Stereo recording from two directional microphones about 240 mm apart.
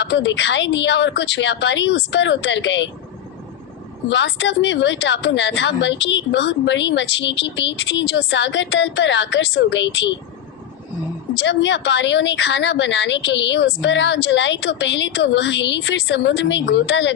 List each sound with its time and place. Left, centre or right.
0.0 s speech: left
4.1 s speech: left
11.3 s speech: left